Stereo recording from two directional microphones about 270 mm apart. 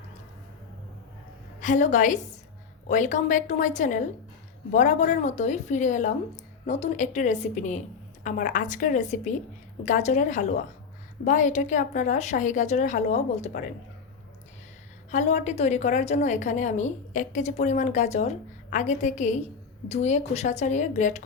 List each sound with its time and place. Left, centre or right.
1.6 s a woman's voice: left
15.1 s a woman's voice: left